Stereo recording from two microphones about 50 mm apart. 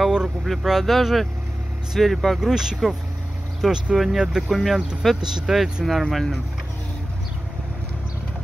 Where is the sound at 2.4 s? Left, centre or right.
Centre.